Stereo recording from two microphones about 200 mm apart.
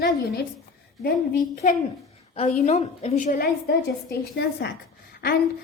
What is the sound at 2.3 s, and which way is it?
A woman's voice, 35° left (ahead or behind).